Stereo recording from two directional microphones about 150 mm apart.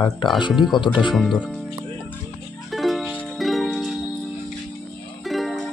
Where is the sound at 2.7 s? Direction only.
Centre (ahead or behind).